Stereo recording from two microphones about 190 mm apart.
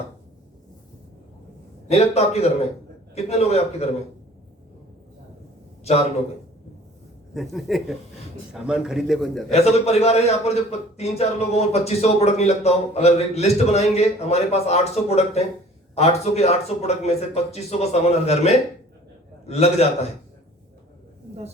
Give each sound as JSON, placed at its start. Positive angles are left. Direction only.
{"t": 1.9, "sound": "a man's voice", "side_deg": 35}
{"t": 7.3, "sound": "a man's voice", "side_deg": 0}
{"t": 9.5, "sound": "a man's voice", "side_deg": 35}